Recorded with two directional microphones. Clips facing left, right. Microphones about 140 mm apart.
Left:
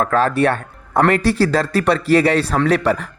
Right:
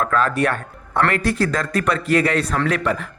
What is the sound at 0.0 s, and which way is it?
A man's voice, 35° left (ahead or behind).